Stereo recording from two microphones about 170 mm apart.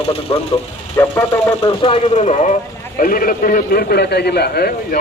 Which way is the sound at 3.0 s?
55° left (ahead or behind).